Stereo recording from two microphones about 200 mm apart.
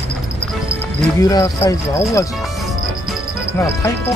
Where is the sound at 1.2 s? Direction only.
15° left (ahead or behind).